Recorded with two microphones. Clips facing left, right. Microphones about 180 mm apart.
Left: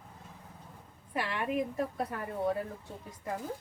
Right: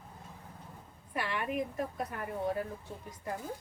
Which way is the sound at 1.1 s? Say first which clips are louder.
Left 2 dB; 25° left (ahead or behind).